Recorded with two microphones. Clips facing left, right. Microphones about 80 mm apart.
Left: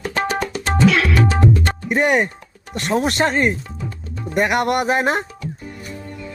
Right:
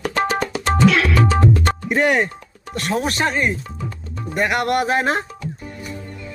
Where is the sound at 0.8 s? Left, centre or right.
Centre.